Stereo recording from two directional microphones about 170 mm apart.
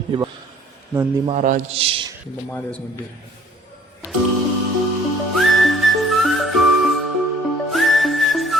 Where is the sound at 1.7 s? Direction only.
35° right (ahead or behind).